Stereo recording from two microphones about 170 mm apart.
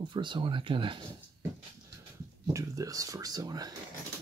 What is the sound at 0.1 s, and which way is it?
Speech, 30° right (ahead or behind).